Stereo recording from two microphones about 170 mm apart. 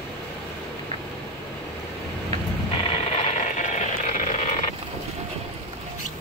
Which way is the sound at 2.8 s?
35° left (ahead or behind).